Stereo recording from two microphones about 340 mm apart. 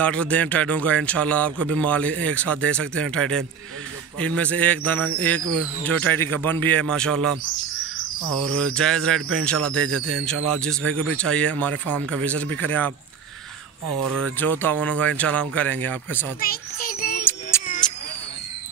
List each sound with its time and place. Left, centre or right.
0.0 s speech: centre
8.4 s speech: centre
9.8 s speech: right
10.2 s speech: centre
14.4 s speech: centre
16.3 s child singing: left
17.2 s music: centre